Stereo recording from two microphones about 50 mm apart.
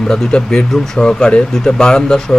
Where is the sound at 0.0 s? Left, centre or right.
Centre.